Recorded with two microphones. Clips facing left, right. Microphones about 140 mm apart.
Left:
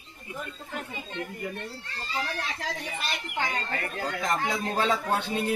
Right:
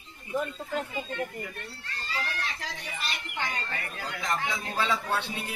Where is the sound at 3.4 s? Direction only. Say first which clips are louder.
Left 4 dB; 45° left (ahead or behind).